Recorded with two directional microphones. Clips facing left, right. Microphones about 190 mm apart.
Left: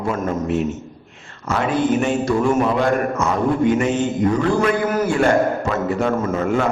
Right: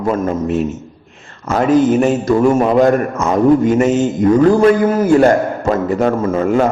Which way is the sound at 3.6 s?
45° right (ahead or behind).